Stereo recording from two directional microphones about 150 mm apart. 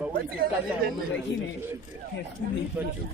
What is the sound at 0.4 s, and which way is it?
Speech, 75° right (ahead or behind).